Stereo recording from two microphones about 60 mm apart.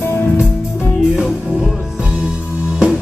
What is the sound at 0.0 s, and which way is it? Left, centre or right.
Music, left.